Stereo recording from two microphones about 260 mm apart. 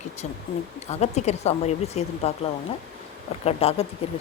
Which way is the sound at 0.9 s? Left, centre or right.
Left.